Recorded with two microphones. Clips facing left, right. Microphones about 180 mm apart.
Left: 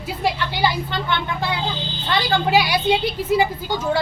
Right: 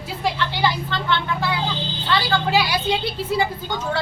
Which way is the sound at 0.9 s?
15° left (ahead or behind).